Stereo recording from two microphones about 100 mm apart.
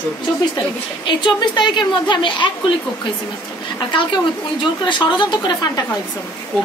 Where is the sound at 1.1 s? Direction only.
50° left (ahead or behind).